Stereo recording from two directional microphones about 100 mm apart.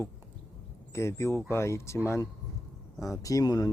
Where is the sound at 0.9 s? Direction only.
25° left (ahead or behind).